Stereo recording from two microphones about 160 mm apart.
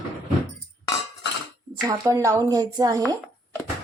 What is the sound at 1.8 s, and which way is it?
A woman's voice, 20° right (ahead or behind).